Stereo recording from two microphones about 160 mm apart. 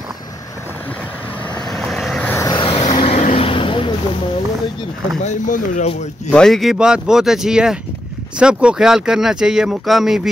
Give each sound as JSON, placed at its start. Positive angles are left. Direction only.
{"t": 1.7, "sound": "vehicle", "side_deg": 0}
{"t": 2.5, "sound": "vehicle", "side_deg": 35}
{"t": 5.2, "sound": "speech", "side_deg": 45}
{"t": 6.3, "sound": "speech", "side_deg": 5}